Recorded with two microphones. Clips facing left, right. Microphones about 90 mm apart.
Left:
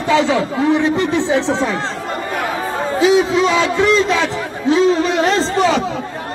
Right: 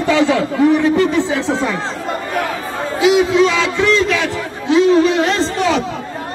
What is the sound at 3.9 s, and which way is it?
A man's voice, 25° left (ahead or behind).